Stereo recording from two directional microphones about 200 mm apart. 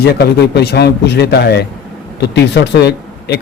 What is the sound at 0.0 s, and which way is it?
A man's voice, 55° left (ahead or behind).